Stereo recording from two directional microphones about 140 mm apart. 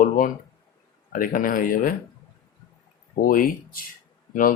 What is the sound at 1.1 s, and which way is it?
Speech, 80° left.